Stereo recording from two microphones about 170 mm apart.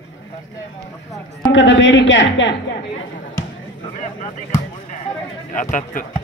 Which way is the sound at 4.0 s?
45° left (ahead or behind).